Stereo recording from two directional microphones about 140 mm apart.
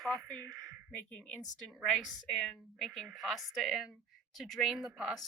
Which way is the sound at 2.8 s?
5° right (ahead or behind).